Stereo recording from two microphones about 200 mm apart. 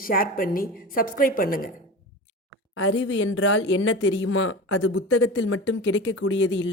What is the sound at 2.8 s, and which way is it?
Speech, 80° left.